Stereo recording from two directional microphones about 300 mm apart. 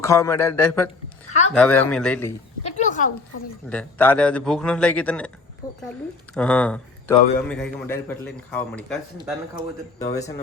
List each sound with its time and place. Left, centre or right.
0.0 s a man's voice: centre
2.6 s a sound: left
3.7 s a man's voice: centre
10.0 s speech: centre